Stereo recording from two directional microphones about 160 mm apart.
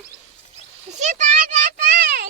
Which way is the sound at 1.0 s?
50° right (ahead or behind).